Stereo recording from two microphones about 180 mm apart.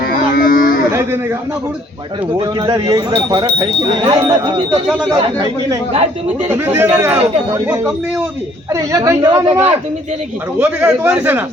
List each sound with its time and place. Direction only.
0.0 s a sound: 55° left (ahead or behind)
2.4 s speech: 25° right (ahead or behind)
5.9 s a woman's voice: 35° right (ahead or behind)
6.5 s a man's voice: 10° right (ahead or behind)
8.7 s a man's voice: 15° right (ahead or behind)
9.5 s a woman's voice: 40° right (ahead or behind)
10.6 s a man's voice: 10° right (ahead or behind)